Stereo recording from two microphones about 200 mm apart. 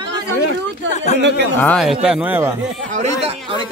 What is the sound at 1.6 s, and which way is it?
Speech, 5° left (ahead or behind).